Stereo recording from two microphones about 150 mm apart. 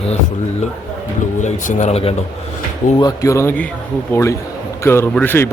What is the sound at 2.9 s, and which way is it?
Speech, 25° left (ahead or behind).